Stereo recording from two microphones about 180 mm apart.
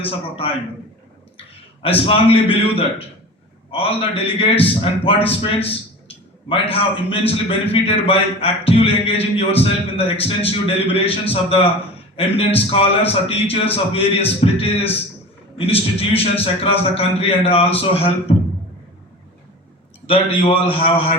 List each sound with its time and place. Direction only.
0.0 s a man's voice: 30° left (ahead or behind)
2.0 s a man's voice: 30° left (ahead or behind)
20.1 s a man's voice: 30° left (ahead or behind)